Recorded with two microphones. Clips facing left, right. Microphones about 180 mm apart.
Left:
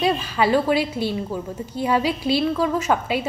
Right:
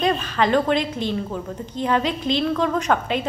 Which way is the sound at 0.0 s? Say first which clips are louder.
Even; 5° left (ahead or behind).